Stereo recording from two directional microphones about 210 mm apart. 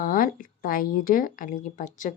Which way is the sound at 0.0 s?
40° left (ahead or behind).